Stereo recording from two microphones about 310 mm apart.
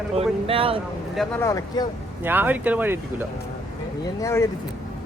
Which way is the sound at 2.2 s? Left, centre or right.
Centre.